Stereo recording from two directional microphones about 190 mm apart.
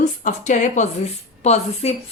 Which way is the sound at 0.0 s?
40° left (ahead or behind).